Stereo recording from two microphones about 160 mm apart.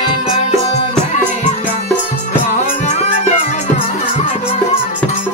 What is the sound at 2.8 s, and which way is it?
Music, 50° left (ahead or behind).